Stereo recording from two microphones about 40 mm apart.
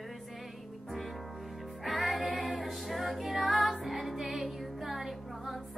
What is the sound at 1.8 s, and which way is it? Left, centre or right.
Music, centre.